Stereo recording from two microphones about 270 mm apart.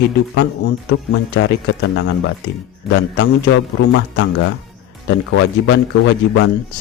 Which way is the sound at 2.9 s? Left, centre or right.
Left.